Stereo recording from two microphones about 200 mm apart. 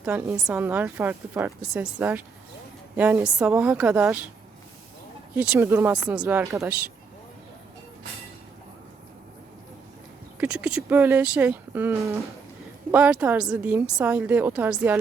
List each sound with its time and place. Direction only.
0.0 s a woman's voice: 5° right (ahead or behind)
5.3 s speech: 10° right (ahead or behind)
10.4 s a woman's voice: 5° right (ahead or behind)